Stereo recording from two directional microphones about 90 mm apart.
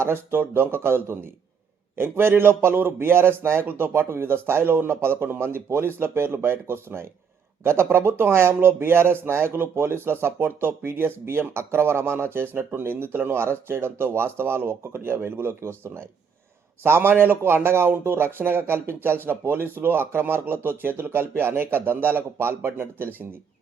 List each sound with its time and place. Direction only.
0.0 s speech: 25° right (ahead or behind)